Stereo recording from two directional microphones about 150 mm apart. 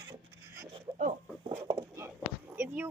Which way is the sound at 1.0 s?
50° right (ahead or behind).